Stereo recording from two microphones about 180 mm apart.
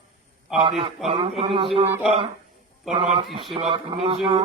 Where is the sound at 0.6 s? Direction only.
30° right (ahead or behind).